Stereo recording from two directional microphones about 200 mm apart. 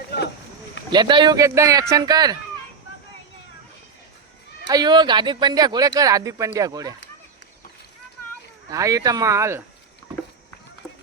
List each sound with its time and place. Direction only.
0.9 s speech: 20° right (ahead or behind)
4.7 s speech: 20° right (ahead or behind)
8.7 s speech: 15° right (ahead or behind)